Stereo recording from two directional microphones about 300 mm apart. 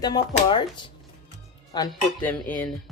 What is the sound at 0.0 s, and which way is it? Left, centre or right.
Speech, centre.